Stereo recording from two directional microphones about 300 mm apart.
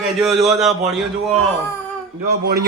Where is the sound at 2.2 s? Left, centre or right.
Right.